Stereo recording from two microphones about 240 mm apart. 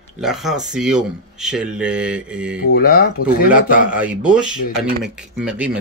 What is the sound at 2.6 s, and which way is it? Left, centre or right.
Speech, left.